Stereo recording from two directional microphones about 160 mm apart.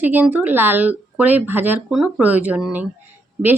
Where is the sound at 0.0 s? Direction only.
10° right (ahead or behind).